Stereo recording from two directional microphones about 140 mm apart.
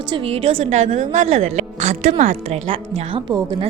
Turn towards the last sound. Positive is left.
turn(degrees=-45)  # may be behind; listen again after turning